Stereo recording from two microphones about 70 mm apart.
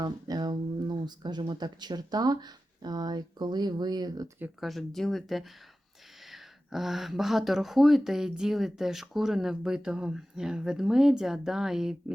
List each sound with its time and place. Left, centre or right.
0.0 s speech: right
4.6 s speech: centre